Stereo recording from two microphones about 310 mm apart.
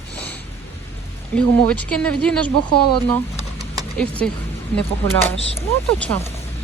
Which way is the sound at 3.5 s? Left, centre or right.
Centre.